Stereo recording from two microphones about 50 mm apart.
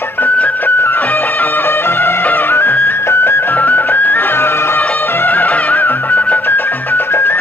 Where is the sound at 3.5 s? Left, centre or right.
Left.